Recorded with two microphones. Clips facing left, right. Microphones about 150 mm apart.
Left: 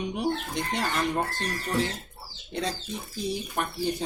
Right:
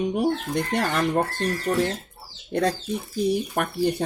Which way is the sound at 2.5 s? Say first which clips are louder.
Right 8 dB; 60° right (ahead or behind).